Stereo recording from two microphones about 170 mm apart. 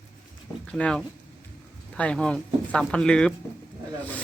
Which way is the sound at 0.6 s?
5° left (ahead or behind).